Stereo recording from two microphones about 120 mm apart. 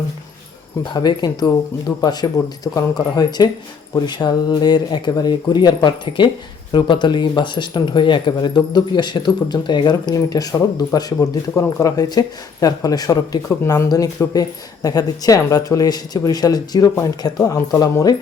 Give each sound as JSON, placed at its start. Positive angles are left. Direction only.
{"t": 0.9, "sound": "speech", "side_deg": 35}